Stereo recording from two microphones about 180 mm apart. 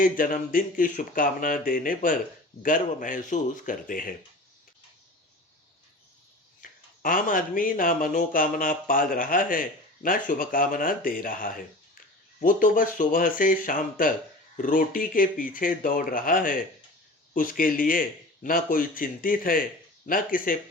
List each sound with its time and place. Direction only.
0.0 s speech: 50° left (ahead or behind)
6.6 s speech: 50° left (ahead or behind)